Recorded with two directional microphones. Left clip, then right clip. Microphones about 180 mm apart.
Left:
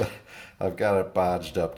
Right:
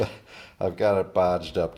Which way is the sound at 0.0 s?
10° right (ahead or behind).